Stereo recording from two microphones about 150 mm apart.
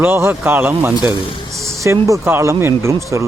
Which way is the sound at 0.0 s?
15° right (ahead or behind).